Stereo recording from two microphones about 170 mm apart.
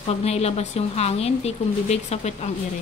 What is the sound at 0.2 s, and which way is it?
A woman's voice, 40° left (ahead or behind).